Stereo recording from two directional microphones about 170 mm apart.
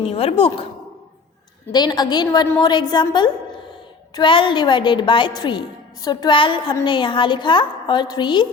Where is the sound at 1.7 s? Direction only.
25° left (ahead or behind).